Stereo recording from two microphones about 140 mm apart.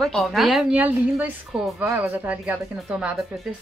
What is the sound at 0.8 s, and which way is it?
A woman's voice, 10° right (ahead or behind).